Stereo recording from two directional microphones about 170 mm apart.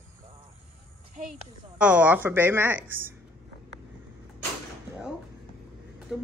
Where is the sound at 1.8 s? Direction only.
10° right (ahead or behind).